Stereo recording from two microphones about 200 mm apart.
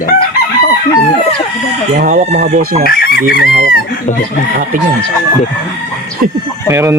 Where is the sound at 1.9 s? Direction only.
40° right (ahead or behind).